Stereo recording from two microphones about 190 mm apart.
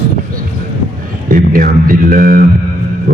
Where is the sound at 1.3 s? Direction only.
50° right (ahead or behind).